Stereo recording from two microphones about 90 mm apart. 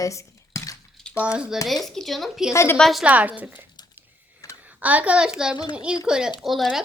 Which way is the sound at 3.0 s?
15° right (ahead or behind).